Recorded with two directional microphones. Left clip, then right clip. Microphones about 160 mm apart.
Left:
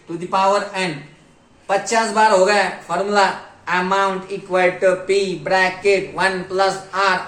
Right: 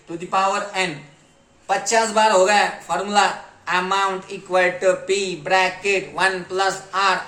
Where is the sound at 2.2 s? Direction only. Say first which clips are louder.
Left 2 dB; 40° right (ahead or behind).